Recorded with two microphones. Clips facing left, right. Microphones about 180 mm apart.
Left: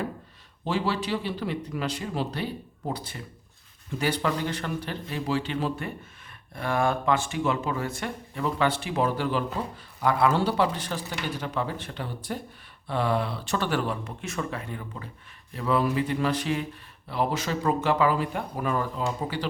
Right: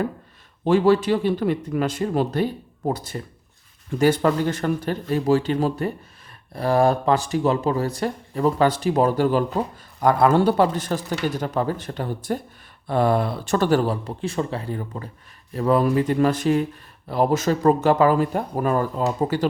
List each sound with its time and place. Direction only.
0.6 s speech: 50° right (ahead or behind)